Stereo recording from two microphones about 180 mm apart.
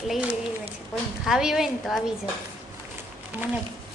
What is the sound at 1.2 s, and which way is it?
Speech, 5° right (ahead or behind).